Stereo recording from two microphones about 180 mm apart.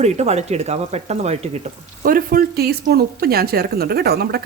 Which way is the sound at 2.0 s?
50° right (ahead or behind).